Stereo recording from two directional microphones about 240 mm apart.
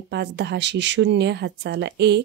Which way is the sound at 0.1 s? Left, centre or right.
Right.